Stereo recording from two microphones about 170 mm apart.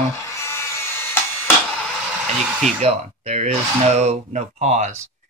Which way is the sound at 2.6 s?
40° right (ahead or behind).